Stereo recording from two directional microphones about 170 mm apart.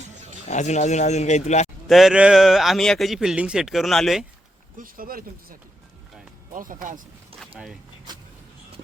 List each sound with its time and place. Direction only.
0.0 s a sound: 45° right (ahead or behind)
0.5 s speech: 45° left (ahead or behind)
1.9 s a man's voice: centre (ahead or behind)
4.8 s speech: 55° right (ahead or behind)
7.5 s a man's voice: 5° right (ahead or behind)
8.1 s vehicle: 25° right (ahead or behind)